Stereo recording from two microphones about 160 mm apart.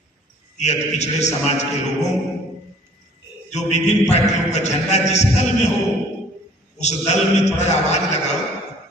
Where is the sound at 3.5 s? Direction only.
45° left (ahead or behind).